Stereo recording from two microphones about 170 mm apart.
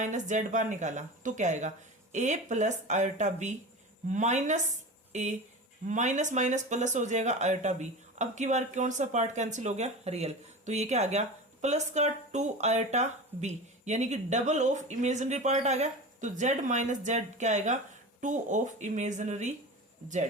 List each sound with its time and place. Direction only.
0.0 s speech: 45° right (ahead or behind)